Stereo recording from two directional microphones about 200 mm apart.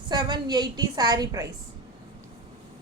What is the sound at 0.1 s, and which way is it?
A woman's voice, 20° right (ahead or behind).